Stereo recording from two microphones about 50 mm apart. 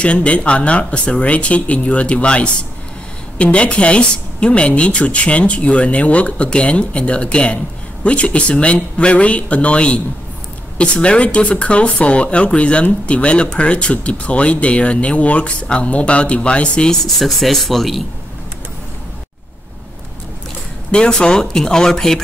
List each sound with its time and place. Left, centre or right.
0.0 s a woman's voice: left; by 18.0 s centre
20.9 s speech: centre